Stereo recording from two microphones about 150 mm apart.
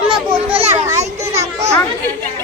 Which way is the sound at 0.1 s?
35° right (ahead or behind).